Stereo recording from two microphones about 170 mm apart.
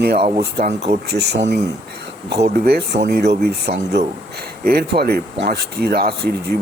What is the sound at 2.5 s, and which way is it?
Speech, 70° right (ahead or behind).